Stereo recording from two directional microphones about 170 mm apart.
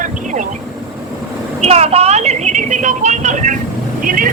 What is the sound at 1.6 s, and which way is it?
A woman's voice, 35° right (ahead or behind).